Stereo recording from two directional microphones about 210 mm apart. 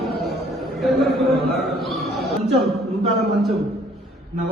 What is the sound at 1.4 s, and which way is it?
Speech, 50° right (ahead or behind).